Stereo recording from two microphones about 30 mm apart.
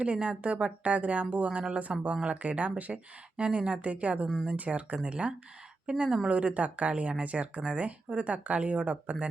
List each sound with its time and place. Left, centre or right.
0.0 s speech: right
2.2 s speech: right
3.3 s speech: right
3.8 s a woman's voice: right